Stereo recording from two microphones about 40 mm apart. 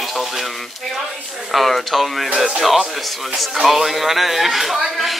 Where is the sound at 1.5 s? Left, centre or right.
Centre.